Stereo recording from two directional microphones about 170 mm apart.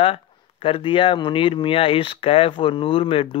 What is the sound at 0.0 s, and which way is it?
A man's voice, 30° left (ahead or behind).